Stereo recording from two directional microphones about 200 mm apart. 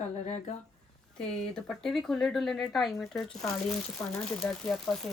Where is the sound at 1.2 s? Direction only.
5° left (ahead or behind).